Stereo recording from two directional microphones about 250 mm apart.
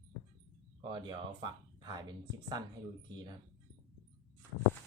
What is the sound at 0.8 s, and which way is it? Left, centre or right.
Speech, centre.